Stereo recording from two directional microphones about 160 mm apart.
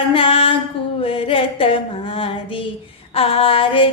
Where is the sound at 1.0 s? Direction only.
35° left (ahead or behind).